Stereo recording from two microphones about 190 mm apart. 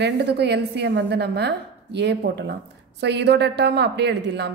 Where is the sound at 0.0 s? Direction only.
60° right (ahead or behind).